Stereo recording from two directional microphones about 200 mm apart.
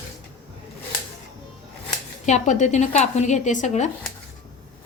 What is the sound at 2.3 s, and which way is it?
A woman's voice, 35° left (ahead or behind).